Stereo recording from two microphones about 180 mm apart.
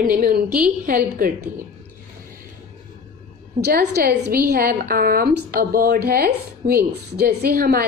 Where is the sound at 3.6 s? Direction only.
60° right (ahead or behind).